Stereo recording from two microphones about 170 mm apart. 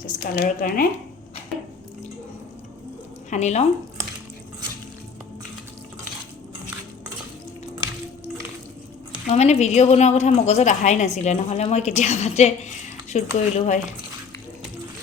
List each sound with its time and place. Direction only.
0.0 s speech: 55° left (ahead or behind)
3.2 s speech: 40° left (ahead or behind)
9.2 s a woman's voice: 40° left (ahead or behind)